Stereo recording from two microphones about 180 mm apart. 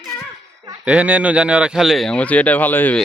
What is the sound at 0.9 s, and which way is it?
Speech, 10° right (ahead or behind).